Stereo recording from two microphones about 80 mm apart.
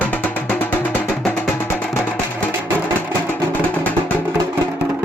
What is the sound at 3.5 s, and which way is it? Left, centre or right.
Music, left.